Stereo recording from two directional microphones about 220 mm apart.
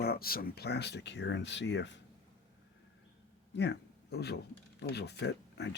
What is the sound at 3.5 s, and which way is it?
Speech, 50° left (ahead or behind).